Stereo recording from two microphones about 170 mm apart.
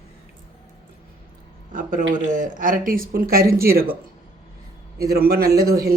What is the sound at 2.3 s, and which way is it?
Speech, 50° right (ahead or behind).